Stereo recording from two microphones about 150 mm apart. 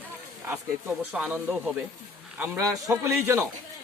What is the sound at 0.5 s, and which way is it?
Speech, 5° right (ahead or behind).